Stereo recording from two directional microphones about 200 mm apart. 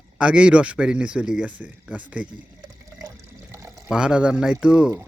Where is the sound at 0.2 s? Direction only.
5° right (ahead or behind).